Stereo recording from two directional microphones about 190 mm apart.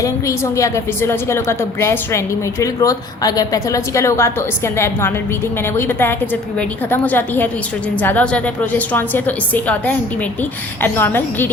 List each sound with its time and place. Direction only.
0.0 s a woman's voice: 15° left (ahead or behind)
5.7 s a woman's voice: 10° left (ahead or behind)